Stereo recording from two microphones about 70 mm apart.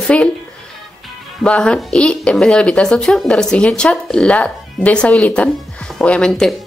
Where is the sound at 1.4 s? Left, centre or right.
Centre.